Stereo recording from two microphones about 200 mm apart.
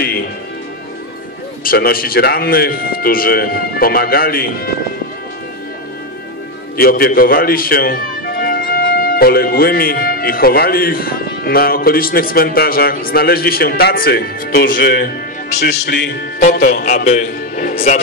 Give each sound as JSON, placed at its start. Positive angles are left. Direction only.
{"t": 1.6, "sound": "speech", "side_deg": 45}
{"t": 6.8, "sound": "speech", "side_deg": 45}
{"t": 16.3, "sound": "a man's voice", "side_deg": 45}